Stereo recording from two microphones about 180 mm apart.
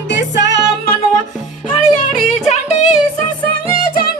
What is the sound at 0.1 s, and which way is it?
Music, 80° left.